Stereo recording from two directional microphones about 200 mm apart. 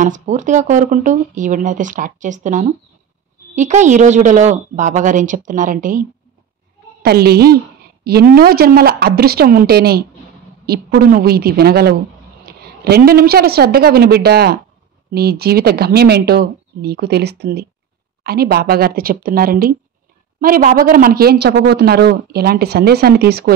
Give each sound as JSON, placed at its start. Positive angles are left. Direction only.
{"t": 0.0, "sound": "speech", "side_deg": -40}
{"t": 7.0, "sound": "a woman's voice", "side_deg": -50}